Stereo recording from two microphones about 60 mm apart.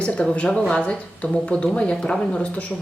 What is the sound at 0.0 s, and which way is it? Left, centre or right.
Speech, left.